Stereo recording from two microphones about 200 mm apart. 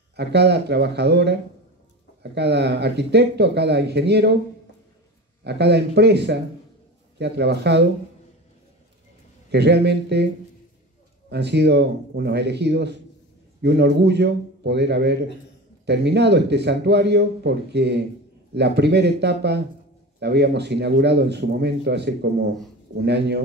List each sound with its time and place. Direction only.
0.1 s speech: 55° right (ahead or behind)
2.3 s speech: 55° right (ahead or behind)
5.4 s speech: 55° right (ahead or behind)
9.5 s speech: 55° right (ahead or behind)
11.2 s speech: 55° right (ahead or behind)